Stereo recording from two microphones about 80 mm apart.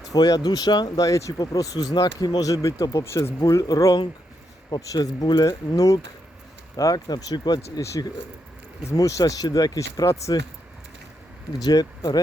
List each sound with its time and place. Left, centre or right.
0.1 s speech: left
3.0 s speech: left
3.4 s speech: left
9.0 s speech: left
11.6 s speech: left